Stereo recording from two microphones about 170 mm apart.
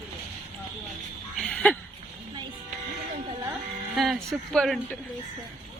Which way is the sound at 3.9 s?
Centre (ahead or behind).